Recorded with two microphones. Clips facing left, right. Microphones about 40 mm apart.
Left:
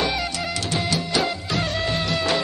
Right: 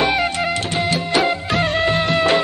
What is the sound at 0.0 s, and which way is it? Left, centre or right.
Music, right.